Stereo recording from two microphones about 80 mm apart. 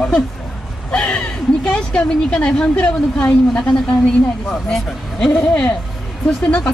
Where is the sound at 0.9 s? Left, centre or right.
Centre.